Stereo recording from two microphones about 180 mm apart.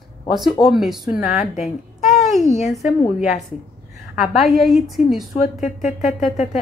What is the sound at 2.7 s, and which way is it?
A woman's voice, centre (ahead or behind).